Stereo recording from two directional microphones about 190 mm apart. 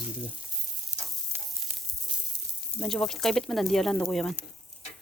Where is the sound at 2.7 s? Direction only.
5° left (ahead or behind).